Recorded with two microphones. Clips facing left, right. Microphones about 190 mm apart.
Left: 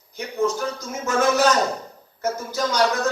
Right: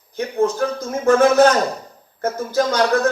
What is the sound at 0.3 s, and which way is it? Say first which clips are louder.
Speech: right 4 dB; 55° right (ahead or behind).